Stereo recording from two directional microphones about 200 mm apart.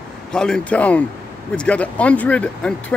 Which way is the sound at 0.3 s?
5° left (ahead or behind).